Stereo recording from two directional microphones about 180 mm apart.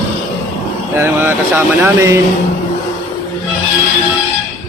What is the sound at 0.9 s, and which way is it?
Speech, 15° right (ahead or behind).